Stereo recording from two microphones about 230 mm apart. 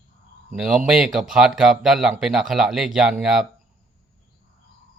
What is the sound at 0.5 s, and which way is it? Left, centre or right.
Speech, centre.